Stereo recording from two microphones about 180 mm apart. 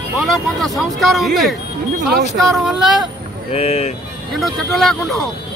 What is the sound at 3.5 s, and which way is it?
Speech, 35° left (ahead or behind).